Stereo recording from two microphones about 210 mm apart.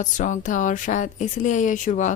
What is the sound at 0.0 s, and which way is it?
A woman's voice, 35° left (ahead or behind).